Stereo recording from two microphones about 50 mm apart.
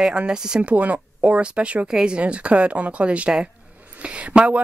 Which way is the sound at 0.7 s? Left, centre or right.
Right.